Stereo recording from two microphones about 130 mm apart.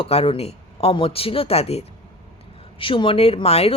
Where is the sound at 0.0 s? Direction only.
45° left (ahead or behind).